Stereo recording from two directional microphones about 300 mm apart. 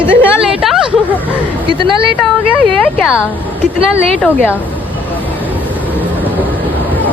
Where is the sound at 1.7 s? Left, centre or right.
Centre.